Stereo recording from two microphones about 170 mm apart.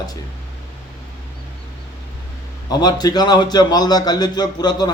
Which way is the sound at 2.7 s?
25° left (ahead or behind).